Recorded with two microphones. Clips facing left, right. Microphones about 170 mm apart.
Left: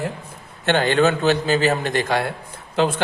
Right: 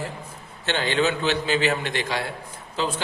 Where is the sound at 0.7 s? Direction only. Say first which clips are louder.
Left 6 dB; 50° left (ahead or behind).